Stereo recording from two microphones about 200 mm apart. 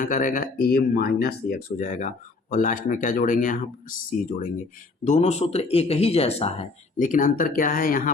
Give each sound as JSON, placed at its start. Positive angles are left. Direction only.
{"t": 0.0, "sound": "speech", "side_deg": 45}